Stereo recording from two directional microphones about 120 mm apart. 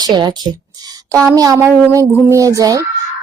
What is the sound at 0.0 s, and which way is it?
Speech, 35° right (ahead or behind).